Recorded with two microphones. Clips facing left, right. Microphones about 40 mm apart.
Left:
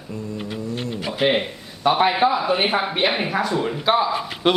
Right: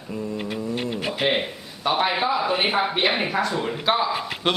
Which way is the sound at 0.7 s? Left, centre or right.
Right.